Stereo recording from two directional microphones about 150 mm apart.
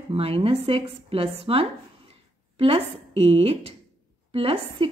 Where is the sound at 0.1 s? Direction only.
40° right (ahead or behind).